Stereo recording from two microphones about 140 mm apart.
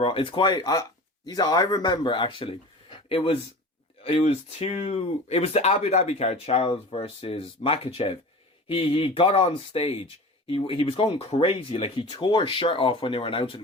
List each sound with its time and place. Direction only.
0.0 s speech: 40° left (ahead or behind)